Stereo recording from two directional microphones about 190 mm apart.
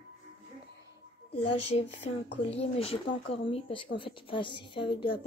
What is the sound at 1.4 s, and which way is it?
Speech, 30° left (ahead or behind).